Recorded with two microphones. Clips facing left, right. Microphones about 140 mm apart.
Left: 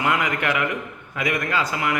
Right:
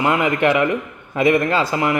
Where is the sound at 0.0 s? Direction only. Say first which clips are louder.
Right 6 dB; 30° right (ahead or behind).